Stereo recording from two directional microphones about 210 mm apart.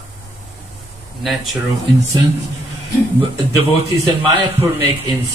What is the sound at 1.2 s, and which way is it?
Speech, centre (ahead or behind).